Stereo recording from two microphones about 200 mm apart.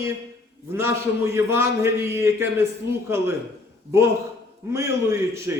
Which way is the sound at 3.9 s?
15° right (ahead or behind).